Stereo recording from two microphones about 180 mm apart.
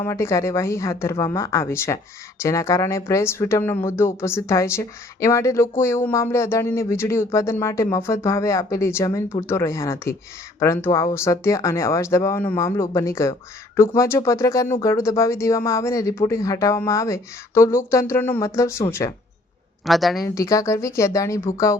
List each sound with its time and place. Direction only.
0.0 s speech: 15° left (ahead or behind)
19.8 s speech: centre (ahead or behind)
20.2 s speech: 20° left (ahead or behind)